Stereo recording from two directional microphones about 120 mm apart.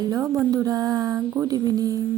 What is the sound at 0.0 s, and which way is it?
A woman's voice, 30° right (ahead or behind).